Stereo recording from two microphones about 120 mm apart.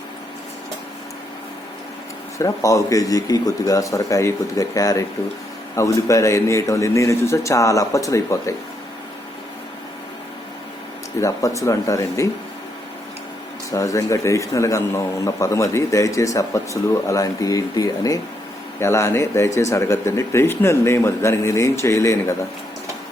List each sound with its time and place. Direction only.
2.4 s a man's voice: 25° left (ahead or behind)
11.2 s a man's voice: 25° left (ahead or behind)
13.7 s a man's voice: 25° left (ahead or behind)